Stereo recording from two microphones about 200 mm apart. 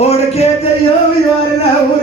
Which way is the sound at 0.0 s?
30° left (ahead or behind).